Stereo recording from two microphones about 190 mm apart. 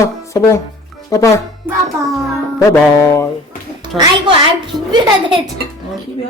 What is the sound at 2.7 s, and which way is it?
Speech, 15° left (ahead or behind).